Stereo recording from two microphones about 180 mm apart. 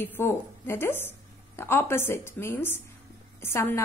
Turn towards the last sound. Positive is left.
turn(degrees=15)  # may be behind; listen again after turning